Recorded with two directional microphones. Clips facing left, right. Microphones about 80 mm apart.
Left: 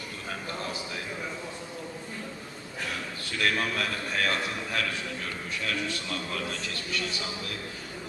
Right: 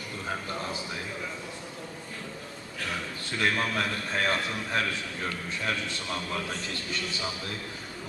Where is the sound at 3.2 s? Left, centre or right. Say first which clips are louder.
Even; right.